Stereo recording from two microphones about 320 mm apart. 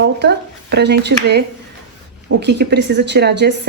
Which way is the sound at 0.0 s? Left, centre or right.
Right.